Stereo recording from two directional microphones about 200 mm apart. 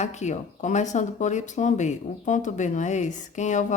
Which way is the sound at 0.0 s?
35° left (ahead or behind).